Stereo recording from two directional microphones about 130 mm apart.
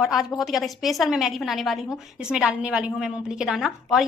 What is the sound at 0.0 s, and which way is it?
A woman's voice, centre (ahead or behind).